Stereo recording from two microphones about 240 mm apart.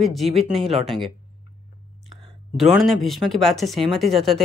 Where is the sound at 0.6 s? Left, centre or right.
Centre.